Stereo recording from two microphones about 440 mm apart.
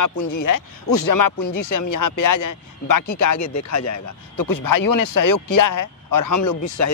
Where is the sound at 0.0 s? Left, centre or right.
Left.